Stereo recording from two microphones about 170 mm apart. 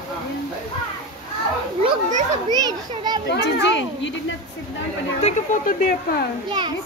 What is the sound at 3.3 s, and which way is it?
Speech, 90° left.